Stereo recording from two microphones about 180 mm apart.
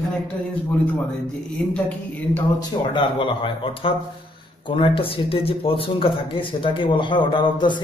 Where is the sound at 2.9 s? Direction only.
25° left (ahead or behind).